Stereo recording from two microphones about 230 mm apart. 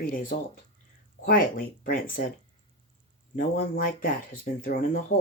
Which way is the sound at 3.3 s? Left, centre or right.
Left.